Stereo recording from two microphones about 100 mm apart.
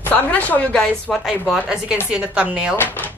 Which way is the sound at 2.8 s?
20° left (ahead or behind).